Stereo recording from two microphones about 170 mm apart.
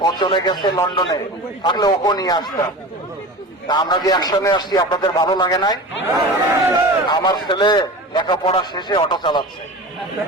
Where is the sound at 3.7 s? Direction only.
25° left (ahead or behind).